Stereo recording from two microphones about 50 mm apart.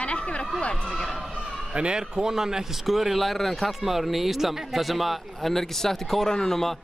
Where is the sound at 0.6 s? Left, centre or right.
Left.